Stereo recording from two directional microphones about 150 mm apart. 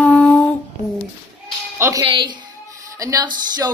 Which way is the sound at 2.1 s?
30° right (ahead or behind).